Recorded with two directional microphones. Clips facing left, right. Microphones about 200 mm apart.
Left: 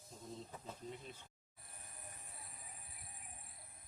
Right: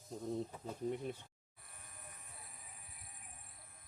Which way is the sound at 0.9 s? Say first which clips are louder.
Right 12 dB; 60° right (ahead or behind).